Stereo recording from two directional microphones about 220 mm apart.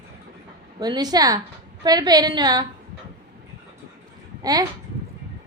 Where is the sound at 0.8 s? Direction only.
20° right (ahead or behind).